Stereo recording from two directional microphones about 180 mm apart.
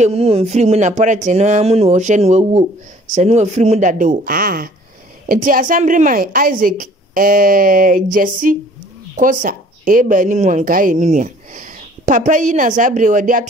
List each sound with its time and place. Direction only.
0.0 s a woman's voice: 35° right (ahead or behind)